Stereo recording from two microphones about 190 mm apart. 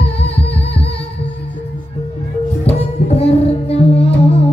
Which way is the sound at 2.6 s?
30° left (ahead or behind).